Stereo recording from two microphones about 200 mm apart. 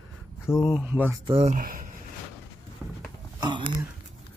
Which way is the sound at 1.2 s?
30° right (ahead or behind).